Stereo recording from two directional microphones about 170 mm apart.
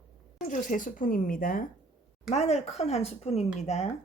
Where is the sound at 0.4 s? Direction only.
50° left (ahead or behind).